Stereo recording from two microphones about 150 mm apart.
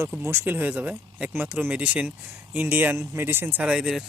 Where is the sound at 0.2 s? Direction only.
15° right (ahead or behind).